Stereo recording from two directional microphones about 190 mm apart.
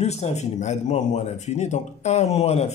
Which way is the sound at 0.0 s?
35° left (ahead or behind).